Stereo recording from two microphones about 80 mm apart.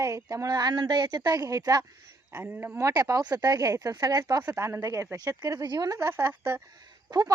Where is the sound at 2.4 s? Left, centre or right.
Right.